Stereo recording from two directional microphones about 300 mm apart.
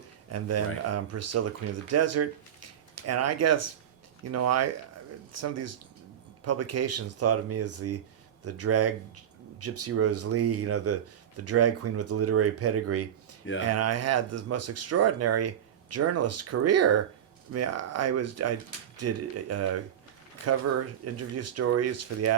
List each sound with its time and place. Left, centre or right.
0.3 s speech: right
21.0 s speech: right